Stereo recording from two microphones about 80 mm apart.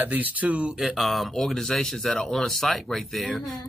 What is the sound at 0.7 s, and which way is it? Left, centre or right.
Speech, centre.